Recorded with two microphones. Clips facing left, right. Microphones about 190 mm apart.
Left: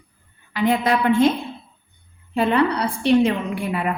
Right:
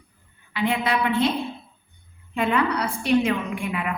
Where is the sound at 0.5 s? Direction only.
40° left (ahead or behind).